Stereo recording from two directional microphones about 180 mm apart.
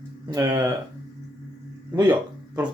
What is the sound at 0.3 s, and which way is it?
Speech, 20° right (ahead or behind).